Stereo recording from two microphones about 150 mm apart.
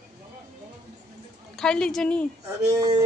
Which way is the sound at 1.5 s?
5° left (ahead or behind).